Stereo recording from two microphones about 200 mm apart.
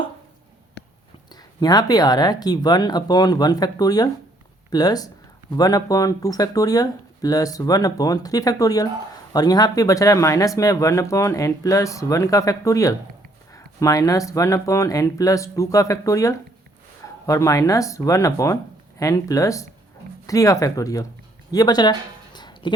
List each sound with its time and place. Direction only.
1.6 s speech: 20° left (ahead or behind)